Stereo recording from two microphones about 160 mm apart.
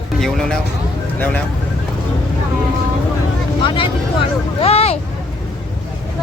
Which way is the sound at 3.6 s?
30° left (ahead or behind).